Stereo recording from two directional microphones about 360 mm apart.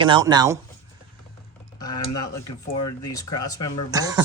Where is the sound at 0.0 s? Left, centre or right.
Centre.